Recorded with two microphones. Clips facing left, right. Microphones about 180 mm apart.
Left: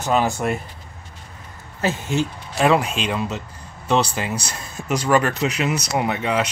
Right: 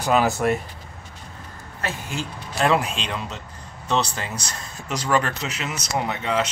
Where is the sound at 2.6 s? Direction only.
Centre (ahead or behind).